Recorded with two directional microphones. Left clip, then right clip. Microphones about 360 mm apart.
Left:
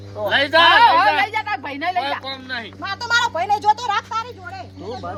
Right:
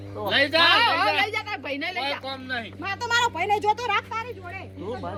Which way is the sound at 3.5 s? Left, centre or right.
Centre.